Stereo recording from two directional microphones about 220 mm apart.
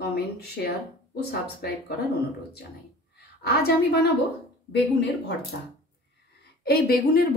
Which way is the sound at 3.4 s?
45° left (ahead or behind).